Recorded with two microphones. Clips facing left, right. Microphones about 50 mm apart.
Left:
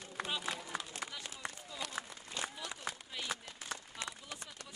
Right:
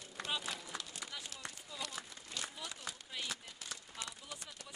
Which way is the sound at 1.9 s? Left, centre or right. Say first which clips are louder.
Left 4 dB; left.